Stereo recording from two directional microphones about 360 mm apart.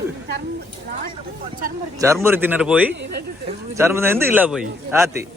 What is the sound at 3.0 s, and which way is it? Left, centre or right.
Speech, right.